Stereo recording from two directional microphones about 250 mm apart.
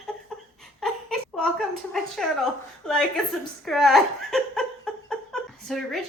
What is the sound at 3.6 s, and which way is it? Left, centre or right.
A woman's voice, centre.